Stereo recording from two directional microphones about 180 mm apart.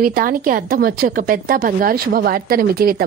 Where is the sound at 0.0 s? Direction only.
55° right (ahead or behind).